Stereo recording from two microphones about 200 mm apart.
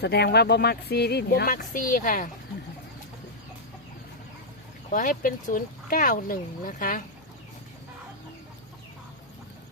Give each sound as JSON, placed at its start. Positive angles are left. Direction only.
{"t": 0.0, "sound": "speech", "side_deg": 55}
{"t": 4.9, "sound": "speech", "side_deg": 40}